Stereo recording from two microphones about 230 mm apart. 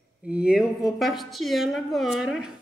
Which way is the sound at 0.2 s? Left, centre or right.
Centre.